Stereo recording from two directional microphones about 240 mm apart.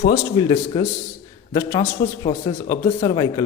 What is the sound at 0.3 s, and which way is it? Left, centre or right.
A man's voice, centre.